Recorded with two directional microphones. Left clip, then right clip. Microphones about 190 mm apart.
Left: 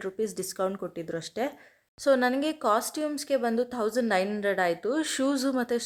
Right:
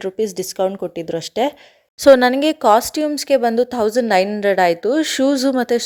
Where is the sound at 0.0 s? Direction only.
30° right (ahead or behind).